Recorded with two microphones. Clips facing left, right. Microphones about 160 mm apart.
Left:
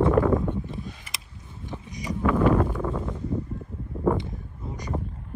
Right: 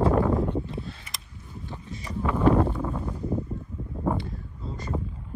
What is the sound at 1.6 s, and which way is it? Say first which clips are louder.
Boat: left 5 dB; 15° left (ahead or behind).